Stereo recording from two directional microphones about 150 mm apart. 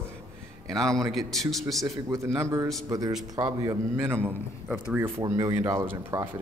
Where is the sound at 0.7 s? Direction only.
5° left (ahead or behind).